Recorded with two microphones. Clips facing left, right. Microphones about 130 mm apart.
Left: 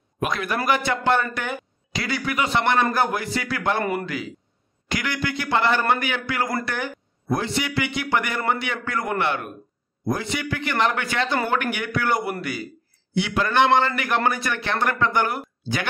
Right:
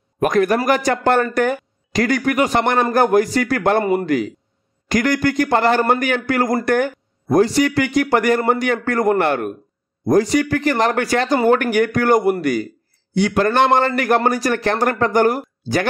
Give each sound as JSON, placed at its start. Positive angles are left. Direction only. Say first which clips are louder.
{"t": 0.2, "sound": "a man's voice", "louder": "right 9 dB", "side_deg": -45}